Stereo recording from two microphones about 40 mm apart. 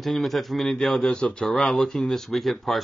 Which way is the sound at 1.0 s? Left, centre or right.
Left.